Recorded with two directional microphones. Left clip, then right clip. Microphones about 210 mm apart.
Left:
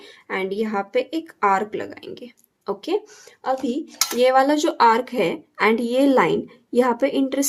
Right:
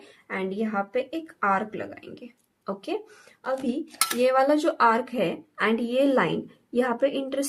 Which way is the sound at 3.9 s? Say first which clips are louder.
Even; 25° right (ahead or behind).